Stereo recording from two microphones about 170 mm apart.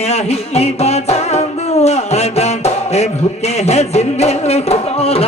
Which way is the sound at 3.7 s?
40° left (ahead or behind).